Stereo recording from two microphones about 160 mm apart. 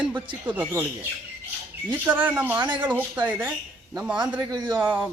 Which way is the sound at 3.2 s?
10° right (ahead or behind).